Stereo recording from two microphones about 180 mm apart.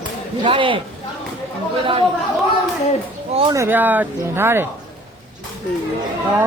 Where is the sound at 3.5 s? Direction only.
15° right (ahead or behind).